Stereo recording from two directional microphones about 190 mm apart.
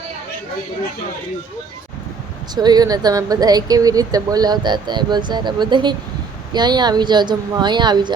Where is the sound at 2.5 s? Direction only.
20° right (ahead or behind).